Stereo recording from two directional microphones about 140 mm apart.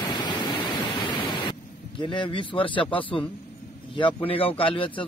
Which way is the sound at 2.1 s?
35° left (ahead or behind).